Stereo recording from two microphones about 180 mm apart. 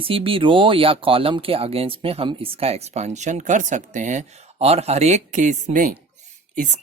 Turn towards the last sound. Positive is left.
turn(degrees=-40)  # may be behind; listen again after turning